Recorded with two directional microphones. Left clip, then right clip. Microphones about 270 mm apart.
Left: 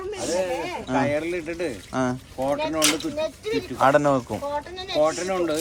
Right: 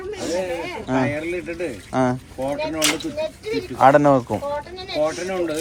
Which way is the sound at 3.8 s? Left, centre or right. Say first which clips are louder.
Right 5 dB; centre.